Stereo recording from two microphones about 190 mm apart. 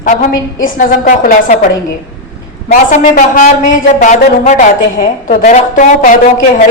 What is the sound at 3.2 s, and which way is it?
A woman's voice, 45° left (ahead or behind).